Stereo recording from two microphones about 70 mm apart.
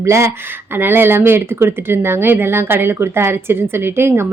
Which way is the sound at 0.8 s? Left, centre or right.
Right.